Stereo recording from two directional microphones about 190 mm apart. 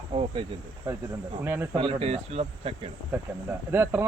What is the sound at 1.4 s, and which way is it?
Speech, 10° right (ahead or behind).